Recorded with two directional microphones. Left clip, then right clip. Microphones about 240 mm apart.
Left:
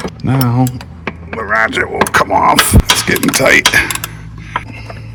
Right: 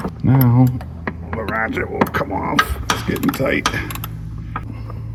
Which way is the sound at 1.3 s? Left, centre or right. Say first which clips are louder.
Left 9 dB; centre.